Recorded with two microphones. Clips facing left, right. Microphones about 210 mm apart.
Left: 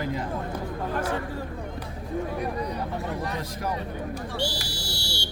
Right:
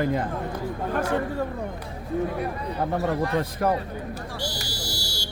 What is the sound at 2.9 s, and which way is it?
Speech, 60° right (ahead or behind).